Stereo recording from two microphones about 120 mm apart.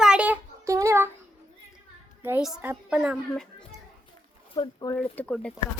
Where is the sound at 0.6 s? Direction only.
25° right (ahead or behind).